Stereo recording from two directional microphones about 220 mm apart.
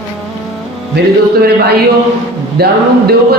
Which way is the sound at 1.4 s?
45° right (ahead or behind).